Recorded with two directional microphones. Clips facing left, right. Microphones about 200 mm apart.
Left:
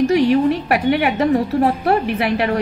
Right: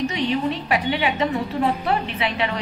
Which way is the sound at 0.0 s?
65° left (ahead or behind).